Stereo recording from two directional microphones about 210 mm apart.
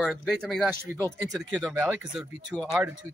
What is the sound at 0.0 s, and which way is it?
Speech, centre (ahead or behind).